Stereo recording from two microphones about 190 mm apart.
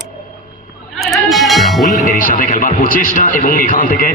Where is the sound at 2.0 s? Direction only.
45° left (ahead or behind).